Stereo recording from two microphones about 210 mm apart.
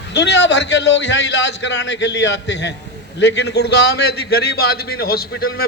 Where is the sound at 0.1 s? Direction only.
55° left (ahead or behind).